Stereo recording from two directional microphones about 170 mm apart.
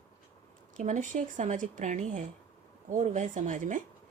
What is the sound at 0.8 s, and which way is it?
Speech, 45° right (ahead or behind).